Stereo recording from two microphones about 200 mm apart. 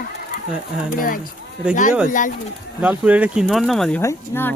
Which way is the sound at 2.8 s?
5° right (ahead or behind).